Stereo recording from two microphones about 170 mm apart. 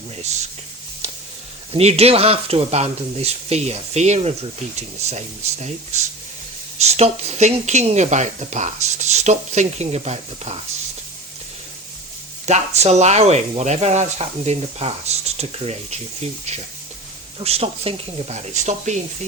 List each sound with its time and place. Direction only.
0.2 s speech: 40° right (ahead or behind)
1.7 s speech: 40° right (ahead or behind)
12.5 s speech: 40° right (ahead or behind)
17.4 s speech: 35° right (ahead or behind)